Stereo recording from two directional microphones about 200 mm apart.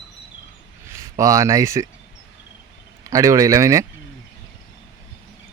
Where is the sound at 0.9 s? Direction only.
15° right (ahead or behind).